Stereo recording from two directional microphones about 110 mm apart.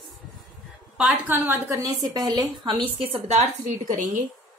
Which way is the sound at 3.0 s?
55° right (ahead or behind).